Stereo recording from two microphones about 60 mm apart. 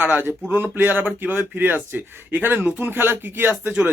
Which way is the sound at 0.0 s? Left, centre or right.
Right.